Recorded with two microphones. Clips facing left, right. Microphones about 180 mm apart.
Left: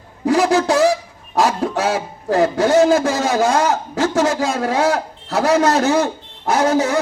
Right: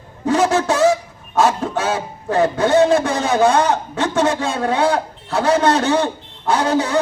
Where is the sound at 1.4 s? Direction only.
35° left (ahead or behind).